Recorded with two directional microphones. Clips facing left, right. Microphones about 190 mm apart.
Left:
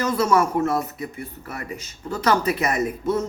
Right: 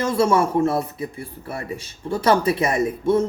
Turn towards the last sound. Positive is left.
turn(degrees=-30)  # may be behind; listen again after turning